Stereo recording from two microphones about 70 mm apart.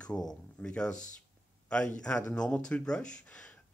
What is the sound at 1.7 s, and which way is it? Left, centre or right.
Speech, centre.